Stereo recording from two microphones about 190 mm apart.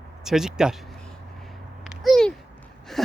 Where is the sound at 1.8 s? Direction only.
Centre (ahead or behind).